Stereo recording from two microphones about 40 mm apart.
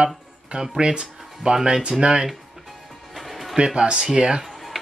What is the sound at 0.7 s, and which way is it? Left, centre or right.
Speech, right.